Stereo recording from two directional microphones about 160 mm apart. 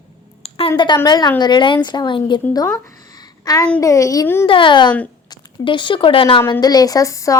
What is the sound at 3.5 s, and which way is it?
A woman's voice, 25° left (ahead or behind).